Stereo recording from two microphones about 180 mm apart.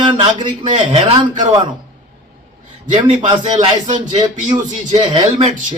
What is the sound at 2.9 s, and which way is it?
A man's voice, 35° right (ahead or behind).